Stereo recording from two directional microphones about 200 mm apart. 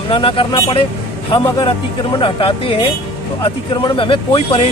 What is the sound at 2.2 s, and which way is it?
Speech, 25° left (ahead or behind).